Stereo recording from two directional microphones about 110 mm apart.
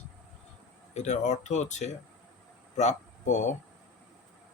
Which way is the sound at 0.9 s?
90° left.